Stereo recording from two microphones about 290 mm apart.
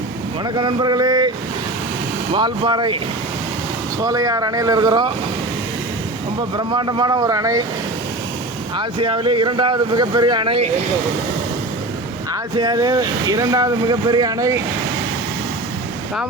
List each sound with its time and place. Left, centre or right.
0.5 s speech: centre
2.3 s speech: centre
4.0 s speech: centre
6.6 s speech: centre
8.8 s speech: centre
12.3 s speech: centre